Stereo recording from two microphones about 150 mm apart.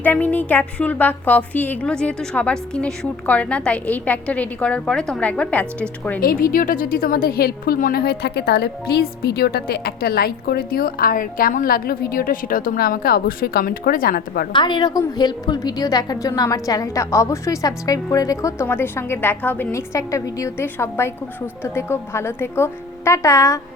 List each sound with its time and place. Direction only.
0.0 s a woman's voice: 10° left (ahead or behind)
6.1 s a woman's voice: 70° left (ahead or behind)
14.5 s a woman's voice: 30° left (ahead or behind)